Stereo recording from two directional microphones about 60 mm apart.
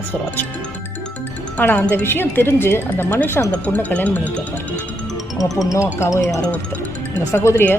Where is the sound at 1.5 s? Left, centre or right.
Left.